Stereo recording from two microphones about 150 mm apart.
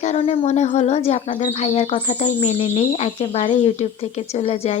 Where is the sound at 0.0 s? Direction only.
50° left (ahead or behind).